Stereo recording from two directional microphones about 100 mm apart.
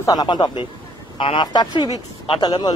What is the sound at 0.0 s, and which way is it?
Speech, 40° left (ahead or behind).